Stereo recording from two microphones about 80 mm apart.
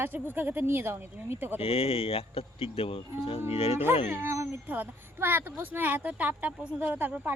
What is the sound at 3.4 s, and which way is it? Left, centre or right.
Speech, right.